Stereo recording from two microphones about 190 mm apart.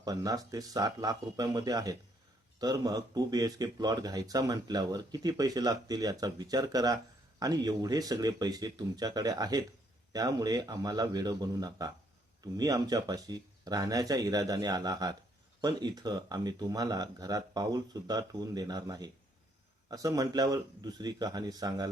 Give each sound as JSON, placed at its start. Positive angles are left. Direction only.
{"t": 0.0, "sound": "speech", "side_deg": -20}